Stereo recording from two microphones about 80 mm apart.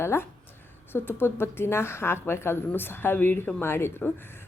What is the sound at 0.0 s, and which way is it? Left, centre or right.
A woman's voice, left.